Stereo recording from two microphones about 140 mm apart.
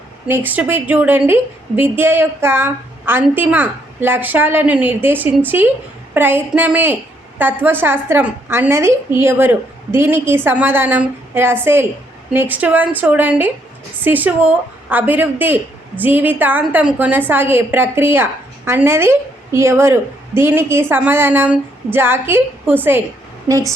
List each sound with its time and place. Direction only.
0.3 s a woman's voice: 15° right (ahead or behind)